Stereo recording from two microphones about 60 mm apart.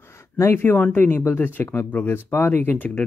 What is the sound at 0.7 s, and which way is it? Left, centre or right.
Speech, left.